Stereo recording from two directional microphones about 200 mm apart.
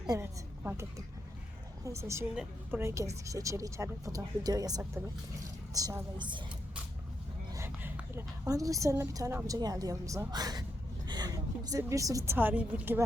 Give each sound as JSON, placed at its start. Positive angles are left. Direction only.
{"t": 0.1, "sound": "a woman's voice", "side_deg": -10}
{"t": 7.5, "sound": "a woman's voice", "side_deg": -10}